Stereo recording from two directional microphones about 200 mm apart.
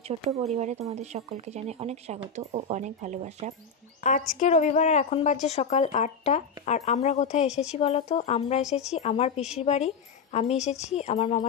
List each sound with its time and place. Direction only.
0.6 s speech: 35° right (ahead or behind)
4.0 s a woman's voice: 40° left (ahead or behind)